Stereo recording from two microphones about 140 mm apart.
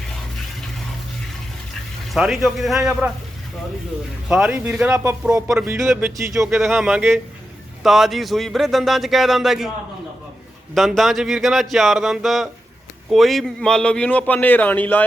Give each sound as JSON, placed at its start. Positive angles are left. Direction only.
{"t": 2.1, "sound": "speech", "side_deg": 0}
{"t": 4.3, "sound": "speech", "side_deg": -5}
{"t": 5.6, "sound": "speech", "side_deg": -20}
{"t": 6.6, "sound": "speech", "side_deg": 0}
{"t": 10.8, "sound": "a man's voice", "side_deg": 0}